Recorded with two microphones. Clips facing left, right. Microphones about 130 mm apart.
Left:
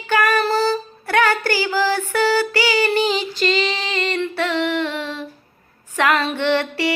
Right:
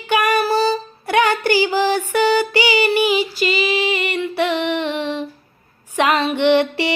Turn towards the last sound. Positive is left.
turn(degrees=-15)  # may be behind; listen again after turning